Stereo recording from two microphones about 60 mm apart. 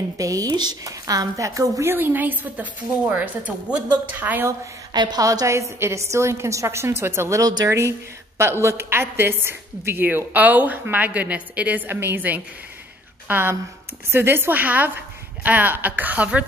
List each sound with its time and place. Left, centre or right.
0.2 s speech: right
1.9 s a woman's voice: right
5.2 s a woman's voice: right
5.5 s a woman's voice: right
13.3 s a woman's voice: right